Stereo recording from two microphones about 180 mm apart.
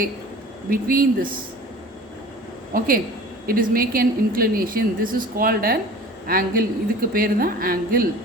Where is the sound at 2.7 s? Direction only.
50° right (ahead or behind).